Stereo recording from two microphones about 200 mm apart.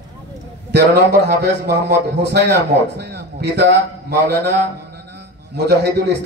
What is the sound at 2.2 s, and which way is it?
A man's voice, 55° right (ahead or behind).